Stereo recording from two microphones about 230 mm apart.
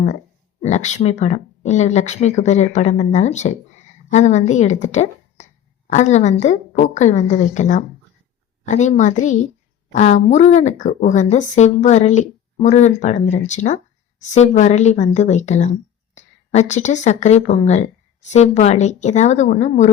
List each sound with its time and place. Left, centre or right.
0.6 s a woman's voice: left